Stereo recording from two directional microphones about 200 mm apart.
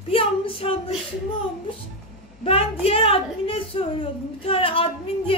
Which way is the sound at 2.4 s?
30° left (ahead or behind).